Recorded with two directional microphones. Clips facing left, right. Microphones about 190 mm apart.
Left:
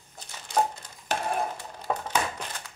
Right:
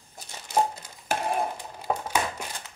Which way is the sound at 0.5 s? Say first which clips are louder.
Right 1 dB; 10° right (ahead or behind).